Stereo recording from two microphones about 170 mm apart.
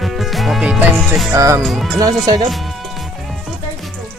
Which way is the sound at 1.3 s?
20° right (ahead or behind).